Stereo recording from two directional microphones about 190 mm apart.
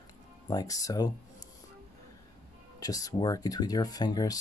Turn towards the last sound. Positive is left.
turn(degrees=20)  # may be behind; listen again after turning